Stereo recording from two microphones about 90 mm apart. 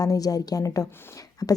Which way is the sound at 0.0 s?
40° left (ahead or behind).